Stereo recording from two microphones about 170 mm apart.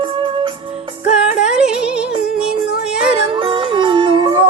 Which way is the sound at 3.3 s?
30° right (ahead or behind).